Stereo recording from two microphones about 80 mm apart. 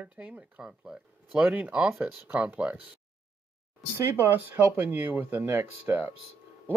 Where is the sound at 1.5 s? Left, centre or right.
Centre.